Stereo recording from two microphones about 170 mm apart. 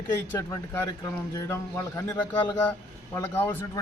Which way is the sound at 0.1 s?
15° left (ahead or behind).